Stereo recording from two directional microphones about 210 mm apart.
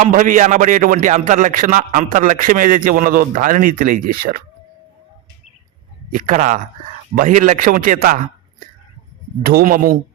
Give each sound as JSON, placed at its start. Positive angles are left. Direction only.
{"t": 0.0, "sound": "speech", "side_deg": -40}
{"t": 6.1, "sound": "speech", "side_deg": -40}
{"t": 9.4, "sound": "speech", "side_deg": -45}